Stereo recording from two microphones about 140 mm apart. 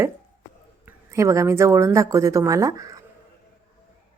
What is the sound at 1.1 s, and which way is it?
Speech, 20° right (ahead or behind).